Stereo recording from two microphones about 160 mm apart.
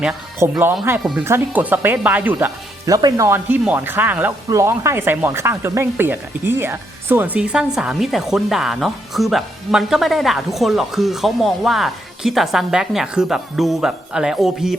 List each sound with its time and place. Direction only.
0.4 s speech: 15° right (ahead or behind)
2.8 s speech: 20° right (ahead or behind); by 14.8 s 5° right (ahead or behind)